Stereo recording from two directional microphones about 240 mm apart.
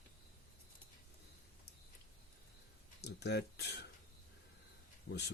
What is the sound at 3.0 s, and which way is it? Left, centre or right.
Speech, left.